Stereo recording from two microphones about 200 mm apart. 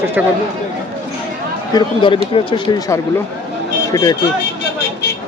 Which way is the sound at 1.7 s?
25° left (ahead or behind).